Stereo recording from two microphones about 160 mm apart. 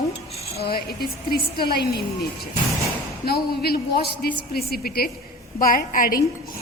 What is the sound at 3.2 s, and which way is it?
A woman's voice, 75° left (ahead or behind).